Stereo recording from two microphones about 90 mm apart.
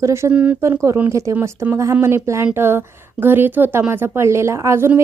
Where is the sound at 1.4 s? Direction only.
25° right (ahead or behind).